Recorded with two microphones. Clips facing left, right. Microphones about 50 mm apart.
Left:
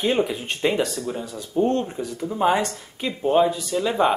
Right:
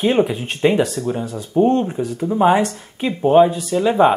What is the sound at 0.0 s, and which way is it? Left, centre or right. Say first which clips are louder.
Speech: right 5 dB; centre.